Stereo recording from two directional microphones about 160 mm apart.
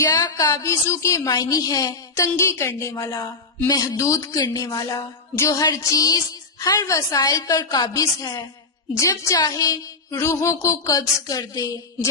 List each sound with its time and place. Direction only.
0.0 s a woman's voice: 20° left (ahead or behind)